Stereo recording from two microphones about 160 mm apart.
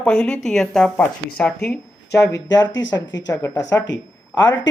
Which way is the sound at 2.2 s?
20° left (ahead or behind).